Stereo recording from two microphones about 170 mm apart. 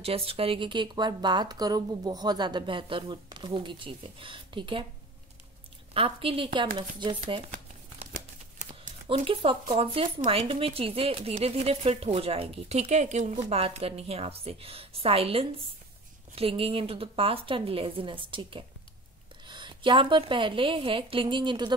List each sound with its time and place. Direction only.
0.0 s speech: 35° right (ahead or behind)
5.9 s speech: 35° right (ahead or behind)
8.1 s crumpling: 50° right (ahead or behind)
9.1 s speech: 30° right (ahead or behind)